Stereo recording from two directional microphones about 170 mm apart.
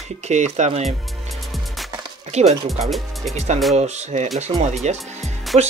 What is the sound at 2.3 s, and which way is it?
Speech, 40° right (ahead or behind).